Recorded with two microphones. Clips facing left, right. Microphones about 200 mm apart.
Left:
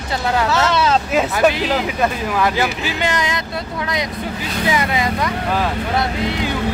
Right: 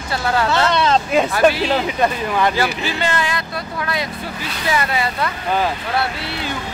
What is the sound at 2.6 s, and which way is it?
Speech, 15° left (ahead or behind).